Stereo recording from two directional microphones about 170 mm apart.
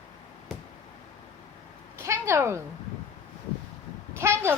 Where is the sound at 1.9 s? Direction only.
15° right (ahead or behind).